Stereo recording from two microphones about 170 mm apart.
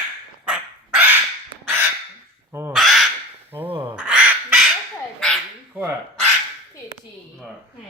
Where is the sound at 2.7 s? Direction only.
Centre (ahead or behind).